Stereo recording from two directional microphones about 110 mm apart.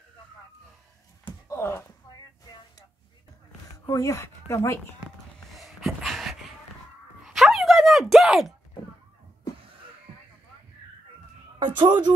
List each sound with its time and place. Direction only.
1.5 s speech: 25° left (ahead or behind)
3.8 s speech: 30° left (ahead or behind)
5.5 s a sound: centre (ahead or behind)
11.6 s speech: 45° right (ahead or behind)